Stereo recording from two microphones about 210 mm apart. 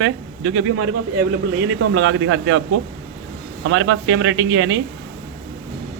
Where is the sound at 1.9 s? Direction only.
75° right (ahead or behind); by 2.6 s 90° right.